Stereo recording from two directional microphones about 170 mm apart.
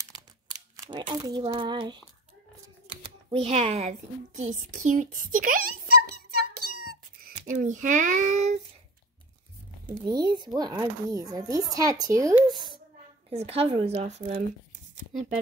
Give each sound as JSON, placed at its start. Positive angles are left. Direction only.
{"t": 0.5, "sound": "a sound", "side_deg": -25}
{"t": 1.5, "sound": "speech", "side_deg": -30}
{"t": 2.9, "sound": "a sound", "side_deg": -30}
{"t": 4.4, "sound": "a child's voice", "side_deg": -45}
{"t": 7.2, "sound": "a child's voice", "side_deg": -50}
{"t": 10.0, "sound": "speech", "side_deg": -25}
{"t": 13.3, "sound": "speech", "side_deg": -35}